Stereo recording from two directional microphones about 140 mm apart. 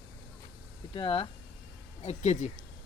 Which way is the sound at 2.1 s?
55° left (ahead or behind).